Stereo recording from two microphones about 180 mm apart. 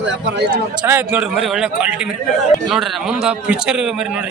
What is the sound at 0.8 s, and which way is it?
Speech, 10° right (ahead or behind).